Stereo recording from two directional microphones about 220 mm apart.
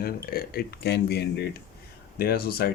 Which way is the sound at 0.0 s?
45° left (ahead or behind).